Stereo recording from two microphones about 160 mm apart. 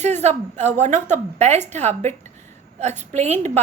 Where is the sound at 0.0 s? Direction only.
45° right (ahead or behind).